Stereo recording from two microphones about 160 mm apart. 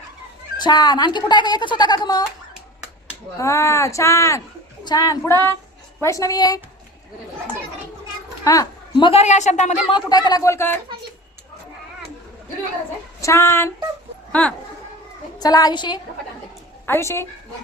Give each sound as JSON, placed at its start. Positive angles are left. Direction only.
{"t": 0.6, "sound": "speech", "side_deg": 25}
{"t": 3.3, "sound": "speech", "side_deg": 20}
{"t": 8.4, "sound": "a sound", "side_deg": 20}
{"t": 9.0, "sound": "a woman's voice", "side_deg": 40}
{"t": 9.9, "sound": "speech", "side_deg": 25}
{"t": 13.2, "sound": "female singing", "side_deg": 15}
{"t": 15.4, "sound": "speech", "side_deg": 25}
{"t": 16.8, "sound": "a woman's voice", "side_deg": 15}